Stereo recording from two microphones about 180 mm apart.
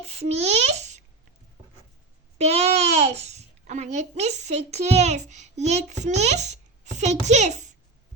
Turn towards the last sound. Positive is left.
turn(degrees=-40)  # may be behind; listen again after turning